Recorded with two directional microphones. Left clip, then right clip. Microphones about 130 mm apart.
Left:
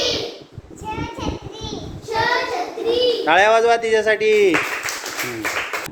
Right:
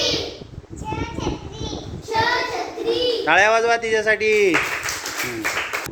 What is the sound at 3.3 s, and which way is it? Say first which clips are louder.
A man's voice: left 1 dB; 15° left (ahead or behind).